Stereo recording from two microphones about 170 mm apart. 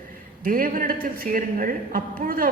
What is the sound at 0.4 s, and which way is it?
A man's voice, 55° right (ahead or behind).